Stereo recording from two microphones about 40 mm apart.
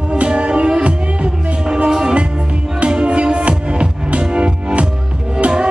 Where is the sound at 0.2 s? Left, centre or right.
Right.